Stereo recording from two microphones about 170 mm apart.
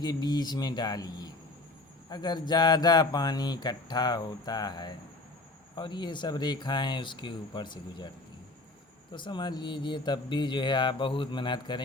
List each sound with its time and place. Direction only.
0.0 s speech: 25° left (ahead or behind)
9.1 s speech: 25° left (ahead or behind)